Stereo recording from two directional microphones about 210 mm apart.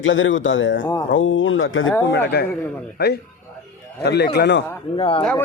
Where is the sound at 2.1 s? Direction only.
50° left (ahead or behind).